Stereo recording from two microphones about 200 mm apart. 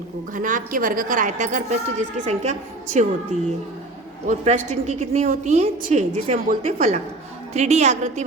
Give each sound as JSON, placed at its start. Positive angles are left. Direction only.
{"t": 0.3, "sound": "a woman's voice", "side_deg": -40}
{"t": 4.3, "sound": "a woman's voice", "side_deg": -35}